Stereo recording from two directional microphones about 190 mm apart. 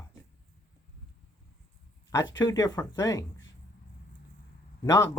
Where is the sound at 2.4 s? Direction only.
20° left (ahead or behind).